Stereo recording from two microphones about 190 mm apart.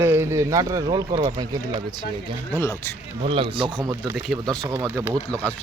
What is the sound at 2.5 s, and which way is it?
Speech, 15° left (ahead or behind).